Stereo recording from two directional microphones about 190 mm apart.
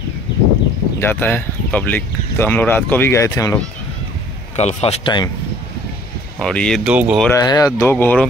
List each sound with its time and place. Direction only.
0.9 s speech: 10° left (ahead or behind)
4.6 s speech: 35° left (ahead or behind)
6.4 s speech: 5° left (ahead or behind)
6.9 s speech: 5° right (ahead or behind)
7.2 s speech: 20° left (ahead or behind)